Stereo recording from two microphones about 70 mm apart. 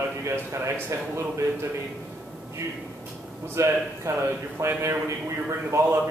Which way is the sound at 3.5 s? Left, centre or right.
Right.